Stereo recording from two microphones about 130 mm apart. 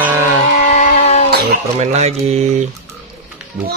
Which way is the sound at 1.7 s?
60° right (ahead or behind).